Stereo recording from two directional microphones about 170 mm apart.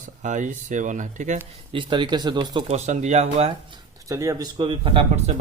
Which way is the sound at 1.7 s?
30° right (ahead or behind).